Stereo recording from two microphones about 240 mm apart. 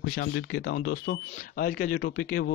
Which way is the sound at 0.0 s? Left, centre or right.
Left.